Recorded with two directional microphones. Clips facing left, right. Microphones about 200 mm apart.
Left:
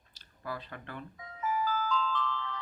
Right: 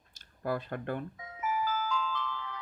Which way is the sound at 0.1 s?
50° right (ahead or behind).